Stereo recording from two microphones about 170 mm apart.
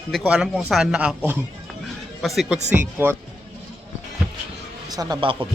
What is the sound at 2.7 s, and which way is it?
Speech, 10° right (ahead or behind).